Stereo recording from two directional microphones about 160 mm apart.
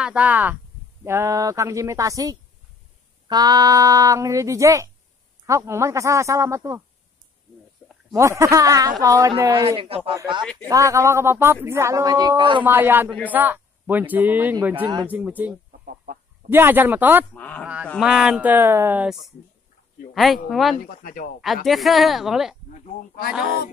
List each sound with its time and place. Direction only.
0.0 s speech: 10° right (ahead or behind)
8.1 s speech: 20° right (ahead or behind)
9.5 s speech: 35° right (ahead or behind)
10.7 s speech: 20° right (ahead or behind)
12.6 s speech: 15° right (ahead or behind)
15.8 s chicken: 60° right (ahead or behind)
16.4 s speech: 15° right (ahead or behind)
17.3 s speech: 10° left (ahead or behind)
18.0 s speech: 5° right (ahead or behind)
20.4 s speech: centre (ahead or behind)
20.7 s speech: 65° left (ahead or behind)
21.6 s speech: centre (ahead or behind)